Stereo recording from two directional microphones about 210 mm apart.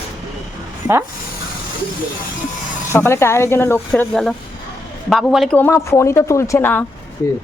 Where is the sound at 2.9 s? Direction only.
10° left (ahead or behind).